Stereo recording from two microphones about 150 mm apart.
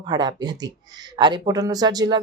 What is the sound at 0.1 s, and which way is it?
Speech, 30° right (ahead or behind).